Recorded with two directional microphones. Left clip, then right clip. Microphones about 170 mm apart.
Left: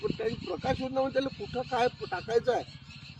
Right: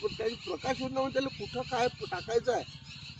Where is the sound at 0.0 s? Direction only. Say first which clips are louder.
Left 1 dB; 15° left (ahead or behind).